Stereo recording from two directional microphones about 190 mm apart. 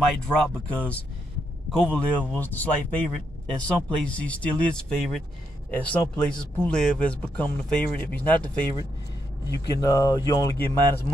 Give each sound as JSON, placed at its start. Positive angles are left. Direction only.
{"t": 0.3, "sound": "speech", "side_deg": 5}